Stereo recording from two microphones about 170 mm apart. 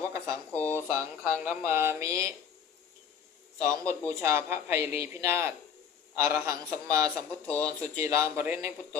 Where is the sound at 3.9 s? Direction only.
15° right (ahead or behind).